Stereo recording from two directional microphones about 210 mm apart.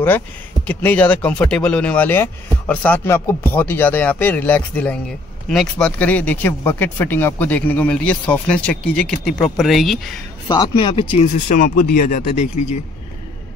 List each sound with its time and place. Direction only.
0.7 s speech: 5° left (ahead or behind)
10.5 s speech: 20° left (ahead or behind)